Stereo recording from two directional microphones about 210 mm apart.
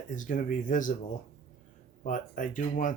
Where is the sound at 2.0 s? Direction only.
40° left (ahead or behind).